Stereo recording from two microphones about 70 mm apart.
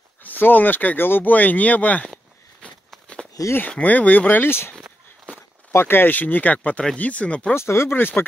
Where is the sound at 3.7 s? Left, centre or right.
Left.